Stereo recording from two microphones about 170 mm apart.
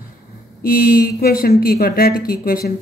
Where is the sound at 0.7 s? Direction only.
60° left (ahead or behind).